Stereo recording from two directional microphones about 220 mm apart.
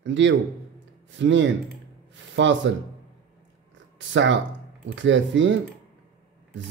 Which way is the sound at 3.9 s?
55° right (ahead or behind).